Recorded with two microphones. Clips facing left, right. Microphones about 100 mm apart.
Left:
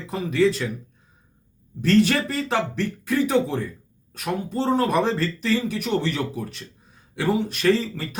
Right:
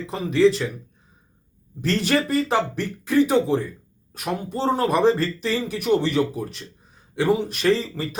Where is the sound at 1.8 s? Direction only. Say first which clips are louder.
Left 3 dB; 5° right (ahead or behind).